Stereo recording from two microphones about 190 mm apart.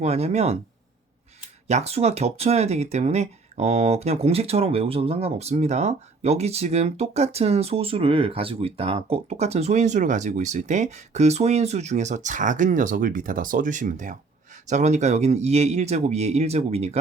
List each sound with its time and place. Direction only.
0.0 s speech: 35° right (ahead or behind)
1.6 s speech: 35° right (ahead or behind)